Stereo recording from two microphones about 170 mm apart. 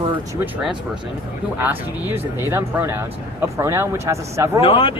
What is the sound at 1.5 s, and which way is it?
Speech, 15° right (ahead or behind).